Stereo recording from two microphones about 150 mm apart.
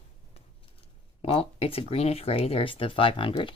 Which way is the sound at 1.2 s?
40° left (ahead or behind).